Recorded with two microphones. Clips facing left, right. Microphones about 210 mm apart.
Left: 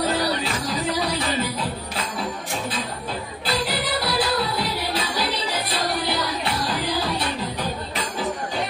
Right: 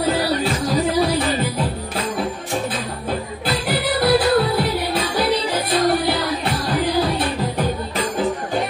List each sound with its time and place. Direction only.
3.6 s music: 55° right (ahead or behind)